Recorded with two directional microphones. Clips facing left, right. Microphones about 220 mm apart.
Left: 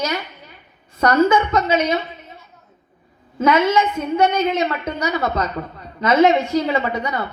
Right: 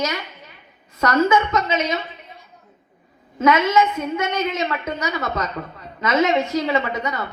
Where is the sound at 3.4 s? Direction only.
30° left (ahead or behind).